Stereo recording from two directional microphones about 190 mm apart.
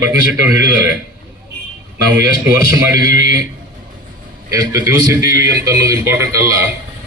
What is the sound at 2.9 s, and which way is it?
Speech, 20° right (ahead or behind).